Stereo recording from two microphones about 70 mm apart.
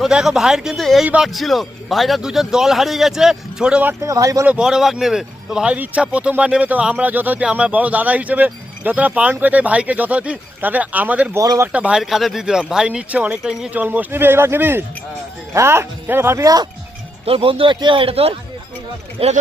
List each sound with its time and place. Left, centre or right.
0.0 s speech: centre
0.8 s a man's voice: centre
4.0 s speech: right
4.6 s speech: centre; by 11.3 s right
11.3 s speech: right
11.7 s speech: centre
11.9 s speech: centre; by 16.4 s right
16.4 s speech: right